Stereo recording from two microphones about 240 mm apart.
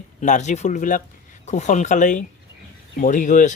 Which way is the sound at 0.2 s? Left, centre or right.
Left.